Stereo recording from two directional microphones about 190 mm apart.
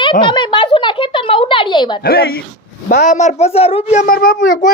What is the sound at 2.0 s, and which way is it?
Speech, 55° left (ahead or behind).